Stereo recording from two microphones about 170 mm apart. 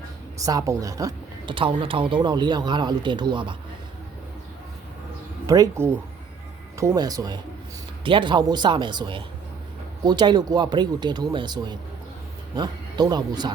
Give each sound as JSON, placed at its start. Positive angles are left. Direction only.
{"t": 0.3, "sound": "a woman's voice", "side_deg": -20}
{"t": 5.5, "sound": "a woman's voice", "side_deg": -15}